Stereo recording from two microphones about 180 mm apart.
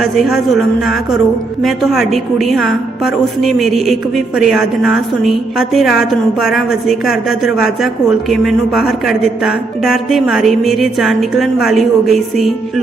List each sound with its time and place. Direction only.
0.0 s speech: centre (ahead or behind)